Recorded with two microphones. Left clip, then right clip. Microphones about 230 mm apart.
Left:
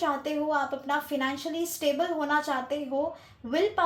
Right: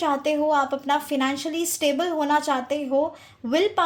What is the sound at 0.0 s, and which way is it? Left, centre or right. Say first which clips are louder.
A woman's voice: right 6 dB; right.